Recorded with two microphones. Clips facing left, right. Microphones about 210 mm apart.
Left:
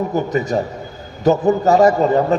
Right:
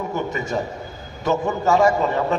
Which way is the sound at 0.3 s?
35° left (ahead or behind).